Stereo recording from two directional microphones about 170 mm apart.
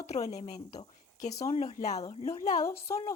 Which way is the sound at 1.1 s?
45° left (ahead or behind).